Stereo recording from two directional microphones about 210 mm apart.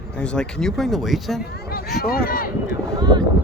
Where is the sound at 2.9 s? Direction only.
20° right (ahead or behind).